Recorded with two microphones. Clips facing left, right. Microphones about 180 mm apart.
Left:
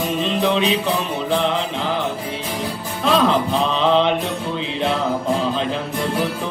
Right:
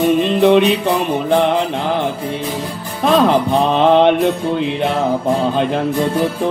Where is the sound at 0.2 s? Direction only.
60° right (ahead or behind).